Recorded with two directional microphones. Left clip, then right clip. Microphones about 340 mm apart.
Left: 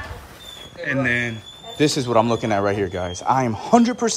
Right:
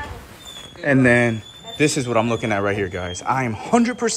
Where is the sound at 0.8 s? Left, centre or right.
Centre.